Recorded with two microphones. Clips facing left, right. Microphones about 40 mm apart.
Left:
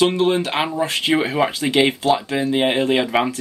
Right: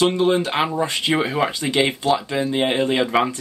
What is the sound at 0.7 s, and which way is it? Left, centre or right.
Speech, centre.